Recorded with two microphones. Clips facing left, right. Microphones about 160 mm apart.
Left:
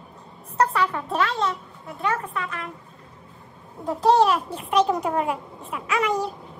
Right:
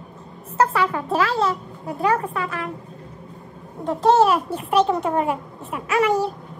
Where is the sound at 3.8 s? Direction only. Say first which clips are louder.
Right 2 dB; centre (ahead or behind).